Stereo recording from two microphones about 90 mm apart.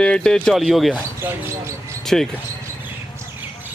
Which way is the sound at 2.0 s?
5° left (ahead or behind).